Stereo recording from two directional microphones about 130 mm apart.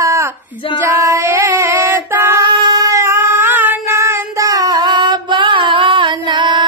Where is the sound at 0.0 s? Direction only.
25° right (ahead or behind).